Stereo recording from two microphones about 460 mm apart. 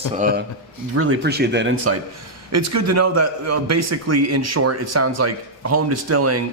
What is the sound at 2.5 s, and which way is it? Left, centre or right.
Speech, right.